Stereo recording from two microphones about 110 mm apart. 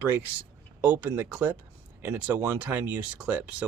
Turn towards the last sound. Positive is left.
turn(degrees=-10)  # may be behind; listen again after turning